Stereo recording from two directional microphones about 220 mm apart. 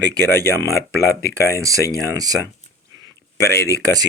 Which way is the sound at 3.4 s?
10° left (ahead or behind).